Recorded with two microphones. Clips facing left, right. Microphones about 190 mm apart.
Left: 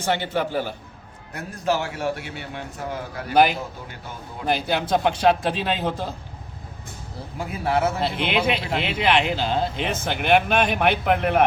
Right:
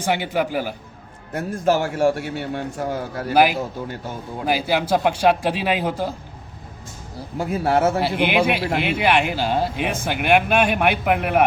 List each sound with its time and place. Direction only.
0.0 s speech: 10° right (ahead or behind)
1.3 s a man's voice: 50° right (ahead or behind)
3.3 s speech: 5° right (ahead or behind)
7.3 s a man's voice: 45° right (ahead or behind)
8.3 s speech: 10° right (ahead or behind)